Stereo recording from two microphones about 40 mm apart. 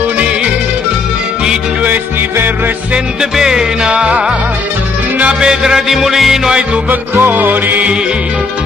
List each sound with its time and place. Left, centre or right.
3.2 s music: centre
3.8 s music: right
5.4 s music: centre
6.9 s music: right